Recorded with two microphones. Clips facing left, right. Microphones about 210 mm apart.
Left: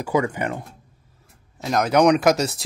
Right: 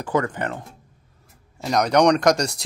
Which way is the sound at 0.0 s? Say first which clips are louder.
Left 1 dB; 10° left (ahead or behind).